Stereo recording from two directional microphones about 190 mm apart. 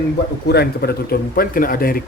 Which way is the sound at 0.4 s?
55° left (ahead or behind).